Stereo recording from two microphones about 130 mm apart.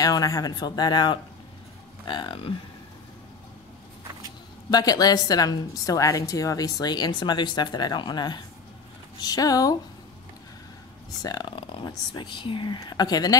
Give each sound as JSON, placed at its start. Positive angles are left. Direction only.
{"t": 0.0, "sound": "a woman's voice", "side_deg": 30}
{"t": 4.6, "sound": "a woman's voice", "side_deg": 30}
{"t": 11.2, "sound": "a woman's voice", "side_deg": 35}